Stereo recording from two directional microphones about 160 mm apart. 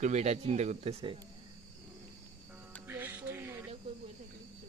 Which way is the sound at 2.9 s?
10° right (ahead or behind).